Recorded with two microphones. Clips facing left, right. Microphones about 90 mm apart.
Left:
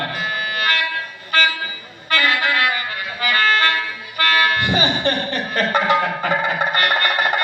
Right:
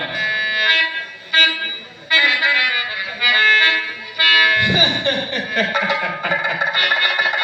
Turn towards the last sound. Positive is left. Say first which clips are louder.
# left 1 dB
turn(degrees=45)  # may be behind; listen again after turning